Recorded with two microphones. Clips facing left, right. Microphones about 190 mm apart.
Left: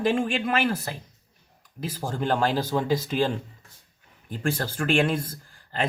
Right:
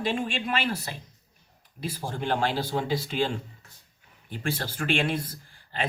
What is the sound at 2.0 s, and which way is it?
Speech, 45° left (ahead or behind).